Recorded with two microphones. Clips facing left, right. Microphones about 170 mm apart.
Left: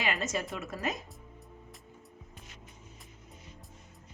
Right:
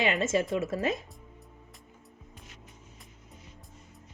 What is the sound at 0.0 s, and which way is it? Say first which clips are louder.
Speech: right 6 dB; 25° right (ahead or behind).